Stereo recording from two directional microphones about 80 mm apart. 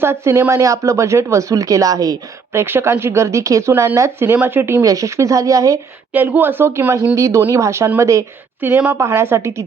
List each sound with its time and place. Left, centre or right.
0.0 s speech: right
2.5 s speech: right
3.7 s speech: right
3.9 s speech: right
4.4 s speech: right
4.8 s speech: right
6.1 s speech: right
8.6 s speech: right
9.0 s speech: right